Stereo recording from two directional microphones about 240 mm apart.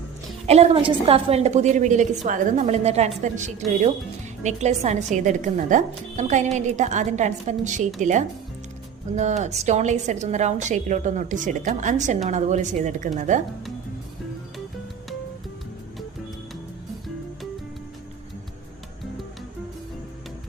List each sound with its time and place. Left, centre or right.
0.4 s a woman's voice: right
9.1 s a woman's voice: right